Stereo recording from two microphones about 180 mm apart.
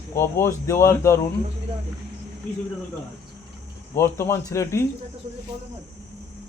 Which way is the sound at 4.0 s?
15° left (ahead or behind).